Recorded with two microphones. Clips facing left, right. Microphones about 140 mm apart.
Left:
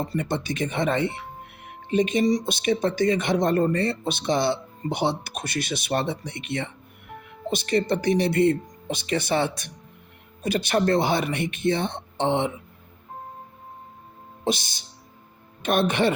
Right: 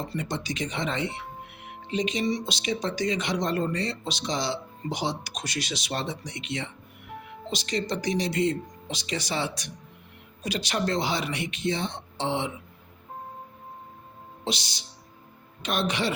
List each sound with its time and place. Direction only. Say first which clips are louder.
0.0 s speech: left 5 dB; 55° left (ahead or behind)
14.4 s speech: left 6 dB; 50° left (ahead or behind)